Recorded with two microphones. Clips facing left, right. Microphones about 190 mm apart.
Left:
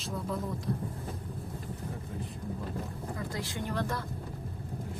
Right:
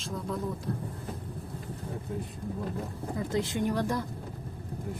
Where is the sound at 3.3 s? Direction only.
20° right (ahead or behind).